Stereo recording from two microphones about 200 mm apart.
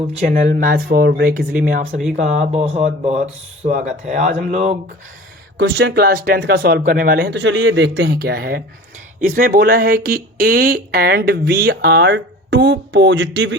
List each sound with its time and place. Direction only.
0.4 s speech: 45° right (ahead or behind)
5.5 s speech: 60° right (ahead or behind)
7.3 s speech: 70° right (ahead or behind)